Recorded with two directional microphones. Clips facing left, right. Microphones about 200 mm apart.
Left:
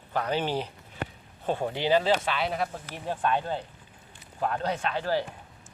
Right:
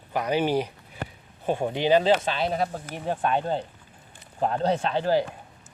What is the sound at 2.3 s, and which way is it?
Speech, 35° right (ahead or behind).